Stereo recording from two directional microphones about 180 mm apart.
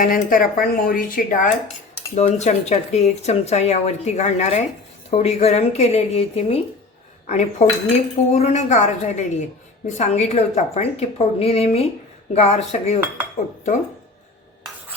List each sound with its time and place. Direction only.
0.0 s a woman's voice: 50° left (ahead or behind)